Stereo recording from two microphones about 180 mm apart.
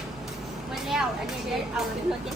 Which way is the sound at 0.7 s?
Centre (ahead or behind).